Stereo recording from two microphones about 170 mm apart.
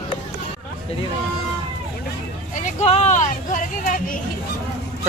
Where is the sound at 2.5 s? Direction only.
45° left (ahead or behind).